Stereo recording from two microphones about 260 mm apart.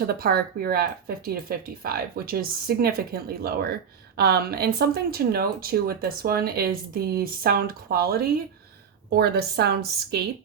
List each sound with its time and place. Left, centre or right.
0.1 s speech: right